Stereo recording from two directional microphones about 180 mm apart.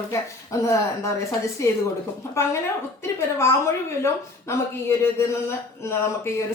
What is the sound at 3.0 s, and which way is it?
A woman's voice, 15° left (ahead or behind).